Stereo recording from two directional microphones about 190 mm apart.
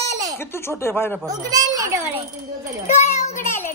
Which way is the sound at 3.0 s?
35° left (ahead or behind).